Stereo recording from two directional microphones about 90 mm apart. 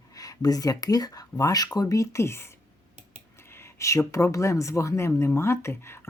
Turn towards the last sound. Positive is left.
turn(degrees=30)  # may be behind; listen again after turning